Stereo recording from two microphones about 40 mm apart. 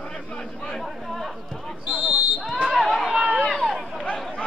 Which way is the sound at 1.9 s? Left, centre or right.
Right.